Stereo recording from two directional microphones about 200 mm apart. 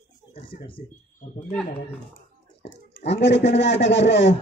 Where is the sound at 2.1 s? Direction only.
60° left (ahead or behind).